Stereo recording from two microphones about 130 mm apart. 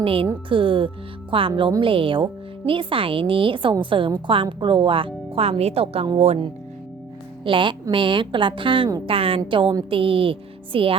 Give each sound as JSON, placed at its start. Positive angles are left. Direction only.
{"t": 0.0, "sound": "a woman's voice", "side_deg": -45}
{"t": 7.4, "sound": "a woman's voice", "side_deg": -40}